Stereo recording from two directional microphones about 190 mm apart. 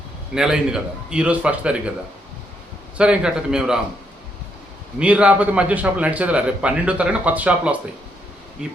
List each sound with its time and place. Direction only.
0.3 s a man's voice: 5° right (ahead or behind)
3.0 s a man's voice: 5° right (ahead or behind)
4.9 s a man's voice: 5° right (ahead or behind)